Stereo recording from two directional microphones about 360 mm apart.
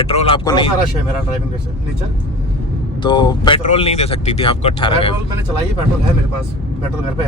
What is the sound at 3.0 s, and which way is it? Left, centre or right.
Speech, centre.